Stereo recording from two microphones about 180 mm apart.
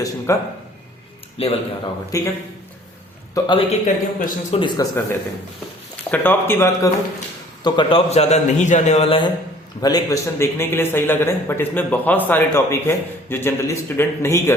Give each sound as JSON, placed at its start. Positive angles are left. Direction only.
{"t": 0.3, "sound": "speech", "side_deg": 15}
{"t": 1.4, "sound": "a man's voice", "side_deg": 30}
{"t": 2.1, "sound": "speech", "side_deg": 20}
{"t": 3.3, "sound": "speech", "side_deg": 20}
{"t": 3.7, "sound": "a man's voice", "side_deg": 40}
{"t": 4.6, "sound": "speech", "side_deg": 20}
{"t": 6.1, "sound": "speech", "side_deg": 10}
{"t": 7.6, "sound": "a man's voice", "side_deg": 30}
{"t": 9.8, "sound": "speech", "side_deg": 20}